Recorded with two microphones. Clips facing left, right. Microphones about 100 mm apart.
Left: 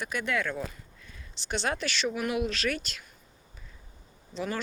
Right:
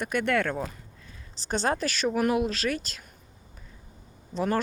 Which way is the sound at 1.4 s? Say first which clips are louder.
Right 4 dB; 40° right (ahead or behind).